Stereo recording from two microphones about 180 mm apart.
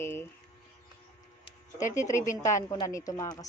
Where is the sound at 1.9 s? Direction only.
15° left (ahead or behind).